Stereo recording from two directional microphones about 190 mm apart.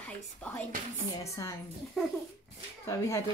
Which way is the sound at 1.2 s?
15° left (ahead or behind).